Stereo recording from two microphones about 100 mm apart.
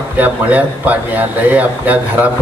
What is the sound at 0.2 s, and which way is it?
A man's voice, 15° right (ahead or behind).